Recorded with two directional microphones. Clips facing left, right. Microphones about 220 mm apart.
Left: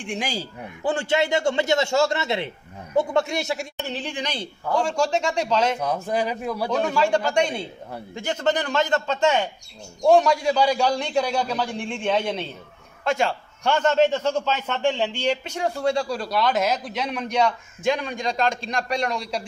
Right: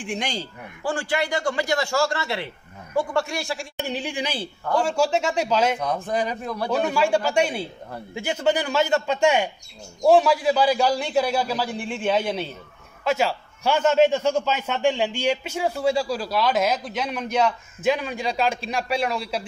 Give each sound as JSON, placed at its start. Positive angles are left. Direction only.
{"t": 0.0, "sound": "a man's voice", "side_deg": 0}
{"t": 0.8, "sound": "a man's voice", "side_deg": 25}
{"t": 3.7, "sound": "a man's voice", "side_deg": -10}
{"t": 5.8, "sound": "a man's voice", "side_deg": 10}
{"t": 6.7, "sound": "a man's voice", "side_deg": -10}